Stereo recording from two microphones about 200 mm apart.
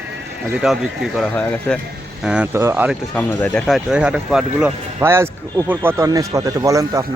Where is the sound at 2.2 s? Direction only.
5° right (ahead or behind).